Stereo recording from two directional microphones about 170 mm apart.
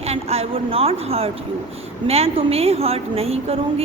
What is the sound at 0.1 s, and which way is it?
A man's voice, 35° right (ahead or behind).